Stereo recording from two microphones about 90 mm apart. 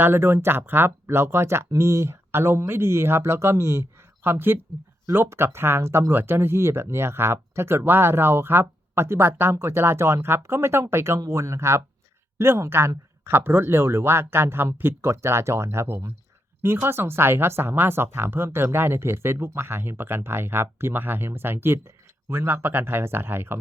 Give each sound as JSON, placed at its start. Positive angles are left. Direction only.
{"t": 0.0, "sound": "speech", "side_deg": -25}